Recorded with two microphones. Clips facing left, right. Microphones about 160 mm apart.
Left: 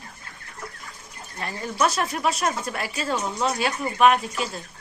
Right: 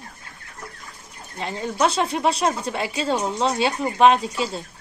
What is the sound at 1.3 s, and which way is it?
A woman's voice, 20° right (ahead or behind).